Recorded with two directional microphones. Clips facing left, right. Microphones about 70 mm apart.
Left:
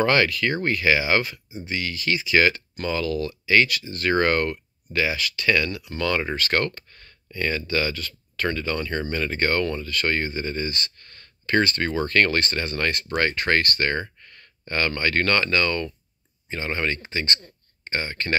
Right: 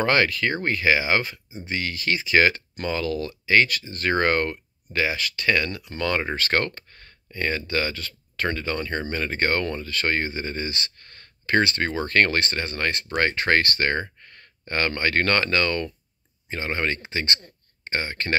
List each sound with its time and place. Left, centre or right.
0.0 s speech: right
1.7 s speech: right
5.9 s speech: right
6.3 s speech: right
11.0 s a sound: right
12.1 s speech: right